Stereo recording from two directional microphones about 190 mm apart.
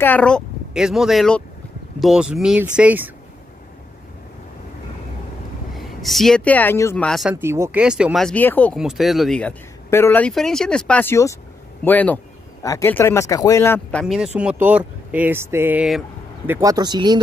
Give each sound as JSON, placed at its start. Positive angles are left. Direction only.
{"t": 0.0, "sound": "speech", "side_deg": 5}
{"t": 5.8, "sound": "speech", "side_deg": 0}
{"t": 7.3, "sound": "speech", "side_deg": -15}
{"t": 8.7, "sound": "speech", "side_deg": 0}
{"t": 13.9, "sound": "speech", "side_deg": 0}